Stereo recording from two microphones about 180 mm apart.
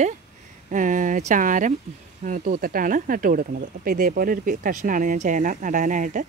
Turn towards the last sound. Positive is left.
turn(degrees=-45)  # may be behind; listen again after turning